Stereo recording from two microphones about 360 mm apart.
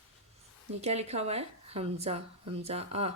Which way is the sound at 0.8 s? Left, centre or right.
Centre.